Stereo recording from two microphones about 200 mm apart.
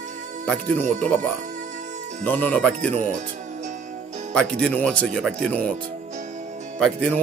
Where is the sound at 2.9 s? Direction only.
35° right (ahead or behind).